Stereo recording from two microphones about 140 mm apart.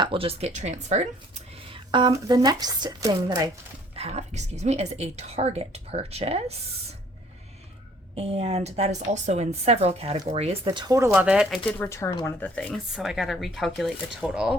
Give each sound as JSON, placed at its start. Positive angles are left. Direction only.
{"t": 0.0, "sound": "a woman's voice", "side_deg": -40}
{"t": 1.7, "sound": "a sound", "side_deg": -35}
{"t": 2.1, "sound": "speech", "side_deg": -25}
{"t": 3.9, "sound": "a woman's voice", "side_deg": -50}
{"t": 8.1, "sound": "a woman's voice", "side_deg": -45}
{"t": 10.7, "sound": "speech", "side_deg": -25}
{"t": 11.1, "sound": "speech", "side_deg": -10}
{"t": 11.8, "sound": "speech", "side_deg": 20}
{"t": 12.5, "sound": "speech", "side_deg": 0}